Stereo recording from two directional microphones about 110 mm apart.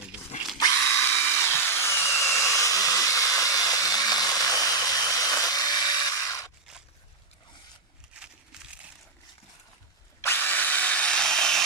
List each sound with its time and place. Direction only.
0.6 s drill: 30° left (ahead or behind)
8.1 s a sound: 10° right (ahead or behind)
10.2 s drill: 20° left (ahead or behind); by 11.6 s 5° left (ahead or behind)